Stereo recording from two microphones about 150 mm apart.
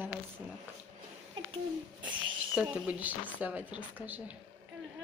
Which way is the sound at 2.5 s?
5° right (ahead or behind).